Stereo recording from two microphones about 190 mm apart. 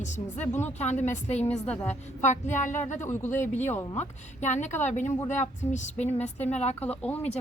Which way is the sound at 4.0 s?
40° left (ahead or behind).